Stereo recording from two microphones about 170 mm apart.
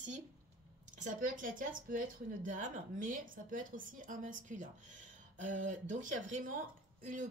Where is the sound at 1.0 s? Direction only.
50° right (ahead or behind).